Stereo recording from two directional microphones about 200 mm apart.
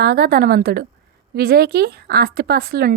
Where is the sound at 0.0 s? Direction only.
50° right (ahead or behind).